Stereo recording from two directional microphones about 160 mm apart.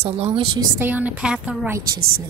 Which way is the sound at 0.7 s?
10° right (ahead or behind).